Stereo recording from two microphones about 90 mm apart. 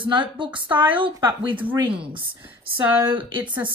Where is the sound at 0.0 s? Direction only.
65° right (ahead or behind).